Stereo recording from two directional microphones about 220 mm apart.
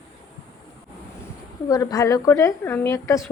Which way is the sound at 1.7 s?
15° left (ahead or behind).